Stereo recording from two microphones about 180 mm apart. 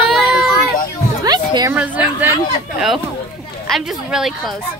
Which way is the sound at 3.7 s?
5° right (ahead or behind).